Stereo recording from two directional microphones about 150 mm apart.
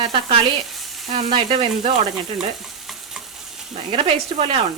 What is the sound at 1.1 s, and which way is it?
Speech, 35° right (ahead or behind).